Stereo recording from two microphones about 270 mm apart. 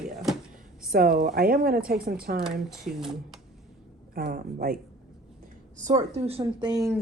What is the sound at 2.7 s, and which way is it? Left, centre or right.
Speech, centre.